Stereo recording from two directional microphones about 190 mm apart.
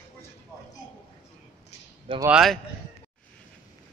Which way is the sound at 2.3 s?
Centre (ahead or behind).